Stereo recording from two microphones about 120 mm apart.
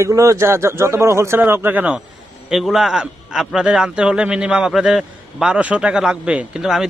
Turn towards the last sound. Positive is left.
turn(degrees=-5)  # may be behind; listen again after turning